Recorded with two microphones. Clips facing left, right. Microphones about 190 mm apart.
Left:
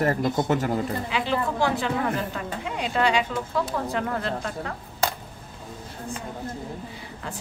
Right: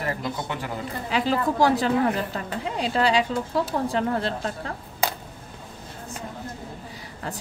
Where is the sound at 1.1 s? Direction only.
40° right (ahead or behind).